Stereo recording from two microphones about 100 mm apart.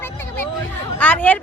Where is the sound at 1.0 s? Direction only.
15° left (ahead or behind).